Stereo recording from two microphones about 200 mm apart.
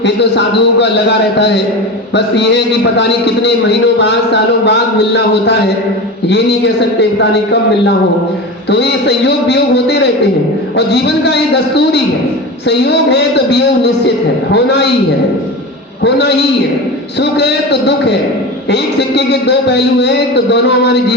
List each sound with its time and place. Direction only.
0.0 s a man's voice: 60° left (ahead or behind)
2.1 s a man's voice: 60° left (ahead or behind)
16.0 s a man's voice: 55° left (ahead or behind)